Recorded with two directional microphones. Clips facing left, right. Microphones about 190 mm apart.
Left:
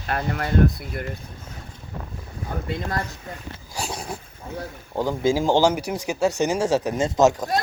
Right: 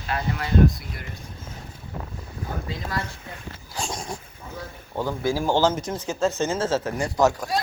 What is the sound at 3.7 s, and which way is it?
Dog, 5° left (ahead or behind).